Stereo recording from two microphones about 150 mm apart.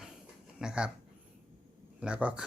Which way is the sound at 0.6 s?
5° right (ahead or behind).